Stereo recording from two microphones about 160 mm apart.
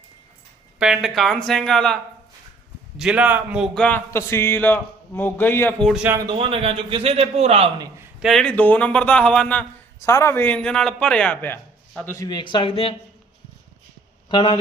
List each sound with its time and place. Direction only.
0.8 s speech: 5° right (ahead or behind)
3.0 s a man's voice: 5° right (ahead or behind)
3.8 s a man's voice: 10° left (ahead or behind)
6.1 s speech: 20° right (ahead or behind)
6.4 s a man's voice: 35° right (ahead or behind)
7.8 s a man's voice: 15° right (ahead or behind)
8.2 s a man's voice: centre (ahead or behind)
10.0 s a man's voice: 20° left (ahead or behind); by 13.0 s 35° left (ahead or behind)
14.3 s speech: 30° left (ahead or behind)